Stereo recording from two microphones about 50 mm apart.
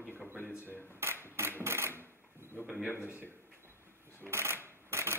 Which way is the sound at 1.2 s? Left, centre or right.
Right.